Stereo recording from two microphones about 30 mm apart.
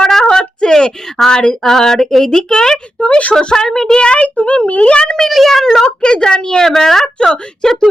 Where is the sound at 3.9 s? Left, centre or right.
Left.